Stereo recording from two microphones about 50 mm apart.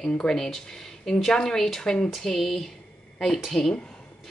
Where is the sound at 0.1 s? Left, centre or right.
Centre.